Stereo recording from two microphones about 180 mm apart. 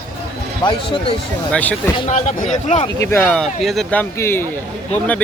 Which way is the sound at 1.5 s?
10° left (ahead or behind).